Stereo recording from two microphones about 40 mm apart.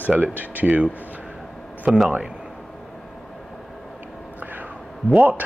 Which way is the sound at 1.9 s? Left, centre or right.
Centre.